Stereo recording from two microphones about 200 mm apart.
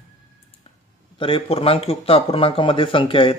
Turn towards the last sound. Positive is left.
turn(degrees=25)  # may be behind; listen again after turning